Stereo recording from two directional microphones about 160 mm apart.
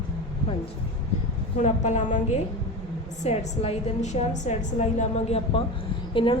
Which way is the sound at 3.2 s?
40° left (ahead or behind).